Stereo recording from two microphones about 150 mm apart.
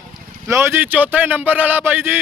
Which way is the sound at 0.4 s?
15° right (ahead or behind).